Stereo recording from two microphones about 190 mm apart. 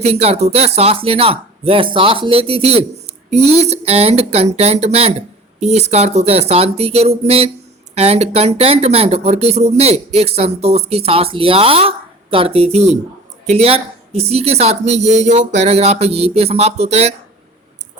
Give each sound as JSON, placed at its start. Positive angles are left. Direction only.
{"t": 0.0, "sound": "speech", "side_deg": -35}